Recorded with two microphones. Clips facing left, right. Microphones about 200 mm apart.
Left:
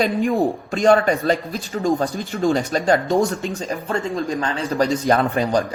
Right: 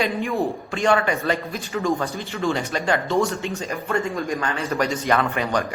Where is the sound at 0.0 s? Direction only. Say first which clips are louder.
Left 4 dB; 40° left (ahead or behind).